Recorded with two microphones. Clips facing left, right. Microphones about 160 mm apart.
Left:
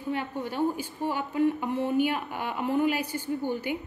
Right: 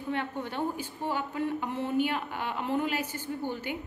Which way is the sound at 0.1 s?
10° left (ahead or behind).